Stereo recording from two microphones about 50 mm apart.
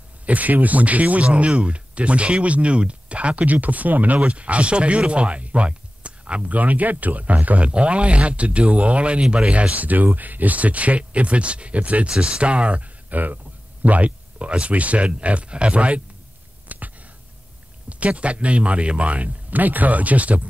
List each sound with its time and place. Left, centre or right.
0.3 s speech: right
16.7 s a sound: right
17.8 s speech: right